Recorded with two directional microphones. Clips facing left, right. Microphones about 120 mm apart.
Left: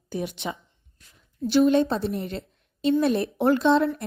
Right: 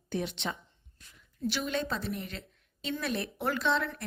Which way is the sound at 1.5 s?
30° left (ahead or behind).